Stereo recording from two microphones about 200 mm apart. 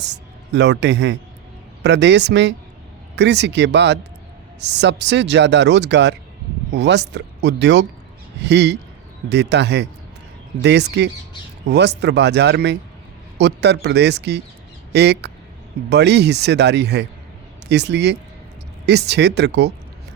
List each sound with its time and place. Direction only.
0.5 s speech: 60° right (ahead or behind)